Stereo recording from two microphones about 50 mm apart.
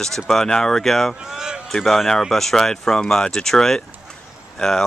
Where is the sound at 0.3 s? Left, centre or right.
Centre.